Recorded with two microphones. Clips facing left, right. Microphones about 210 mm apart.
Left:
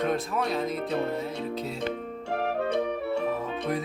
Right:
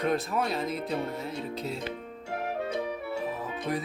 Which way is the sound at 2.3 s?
60° left (ahead or behind).